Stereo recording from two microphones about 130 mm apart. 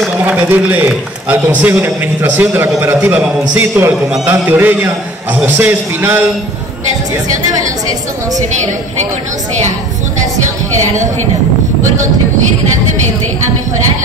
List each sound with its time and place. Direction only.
0.2 s a man's voice: 10° right (ahead or behind)